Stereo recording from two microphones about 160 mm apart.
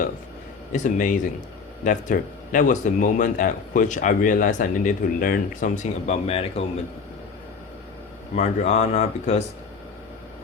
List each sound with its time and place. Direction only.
0.7 s a man's voice: 55° left (ahead or behind)
8.4 s a man's voice: 45° left (ahead or behind)